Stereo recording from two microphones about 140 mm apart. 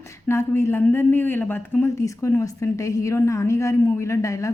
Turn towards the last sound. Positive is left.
turn(degrees=20)  # may be behind; listen again after turning